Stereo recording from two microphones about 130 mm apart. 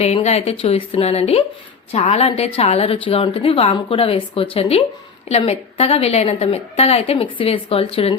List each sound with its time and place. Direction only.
0.0 s a woman's voice: 55° left (ahead or behind)